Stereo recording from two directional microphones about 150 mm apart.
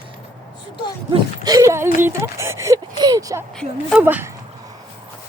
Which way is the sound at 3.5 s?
5° left (ahead or behind).